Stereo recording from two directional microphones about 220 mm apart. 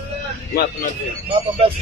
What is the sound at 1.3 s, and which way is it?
Speech, 25° right (ahead or behind).